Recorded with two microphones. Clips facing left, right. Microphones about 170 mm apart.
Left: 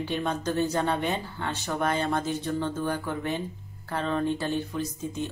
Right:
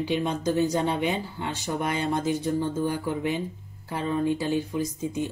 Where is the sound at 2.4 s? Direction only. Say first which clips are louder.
Right 3 dB; 65° left (ahead or behind).